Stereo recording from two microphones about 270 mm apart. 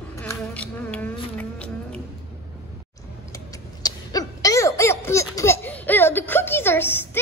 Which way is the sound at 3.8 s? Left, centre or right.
Centre.